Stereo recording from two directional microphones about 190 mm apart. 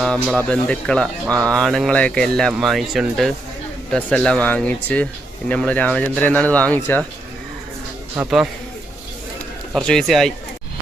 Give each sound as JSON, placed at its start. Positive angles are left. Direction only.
{"t": 0.0, "sound": "speech", "side_deg": 0}
{"t": 8.1, "sound": "speech", "side_deg": -5}
{"t": 9.7, "sound": "speech", "side_deg": 5}